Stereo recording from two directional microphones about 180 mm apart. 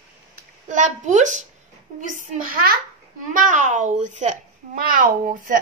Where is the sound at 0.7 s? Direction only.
45° right (ahead or behind).